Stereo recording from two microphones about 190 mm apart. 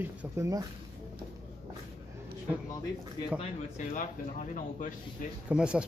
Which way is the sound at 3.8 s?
45° left (ahead or behind).